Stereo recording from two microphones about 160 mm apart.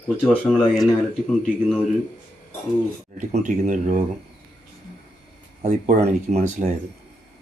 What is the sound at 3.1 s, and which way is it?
Speech, 50° right (ahead or behind).